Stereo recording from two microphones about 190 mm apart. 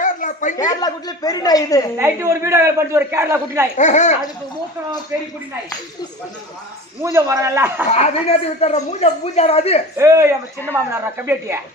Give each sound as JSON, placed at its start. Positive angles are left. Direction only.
{"t": 0.0, "sound": "a sound", "side_deg": 45}
{"t": 0.5, "sound": "speech", "side_deg": 20}
{"t": 2.0, "sound": "a man's voice", "side_deg": -15}
{"t": 3.8, "sound": "speech", "side_deg": 40}
{"t": 5.1, "sound": "a man's voice", "side_deg": -15}
{"t": 7.0, "sound": "a man's voice", "side_deg": -15}
{"t": 7.9, "sound": "speech", "side_deg": 35}
{"t": 10.0, "sound": "a man's voice", "side_deg": -15}